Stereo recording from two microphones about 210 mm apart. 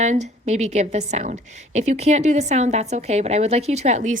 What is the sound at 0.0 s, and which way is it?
A woman's voice, 35° right (ahead or behind).